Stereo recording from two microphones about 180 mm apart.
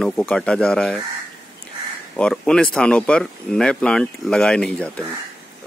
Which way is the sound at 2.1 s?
5° left (ahead or behind).